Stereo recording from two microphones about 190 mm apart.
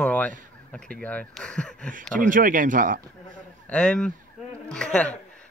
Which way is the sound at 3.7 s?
5° left (ahead or behind).